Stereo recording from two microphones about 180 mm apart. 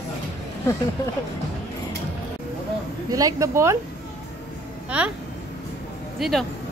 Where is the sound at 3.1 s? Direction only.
20° right (ahead or behind).